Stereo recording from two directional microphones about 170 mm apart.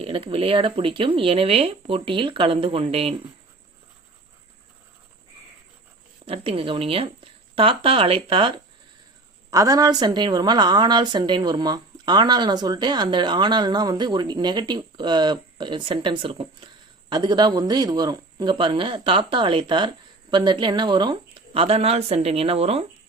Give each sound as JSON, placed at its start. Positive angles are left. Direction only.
{"t": 0.0, "sound": "speech", "side_deg": -35}
{"t": 6.2, "sound": "a woman's voice", "side_deg": -35}